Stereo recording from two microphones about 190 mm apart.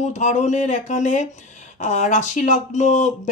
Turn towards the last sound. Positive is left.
turn(degrees=40)  # may be behind; listen again after turning